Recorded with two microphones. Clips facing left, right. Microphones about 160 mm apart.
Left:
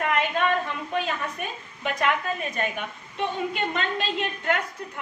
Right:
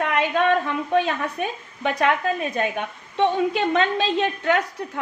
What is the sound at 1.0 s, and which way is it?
A woman's voice, 85° right.